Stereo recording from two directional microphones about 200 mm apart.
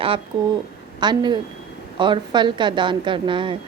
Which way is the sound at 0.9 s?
20° right (ahead or behind).